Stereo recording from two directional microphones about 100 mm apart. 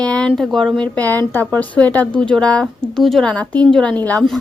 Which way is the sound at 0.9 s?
15° left (ahead or behind).